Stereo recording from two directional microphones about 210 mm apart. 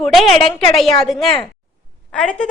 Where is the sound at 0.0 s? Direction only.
Centre (ahead or behind).